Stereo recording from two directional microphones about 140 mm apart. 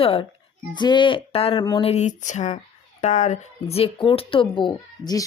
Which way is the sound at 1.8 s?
55° left (ahead or behind).